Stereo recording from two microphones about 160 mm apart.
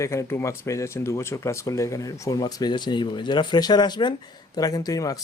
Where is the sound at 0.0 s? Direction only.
20° left (ahead or behind).